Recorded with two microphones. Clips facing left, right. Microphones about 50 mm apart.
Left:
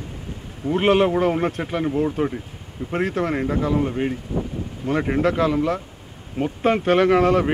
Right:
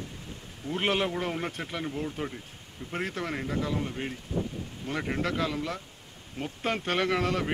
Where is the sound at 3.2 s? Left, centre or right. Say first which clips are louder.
Left 9 dB; left.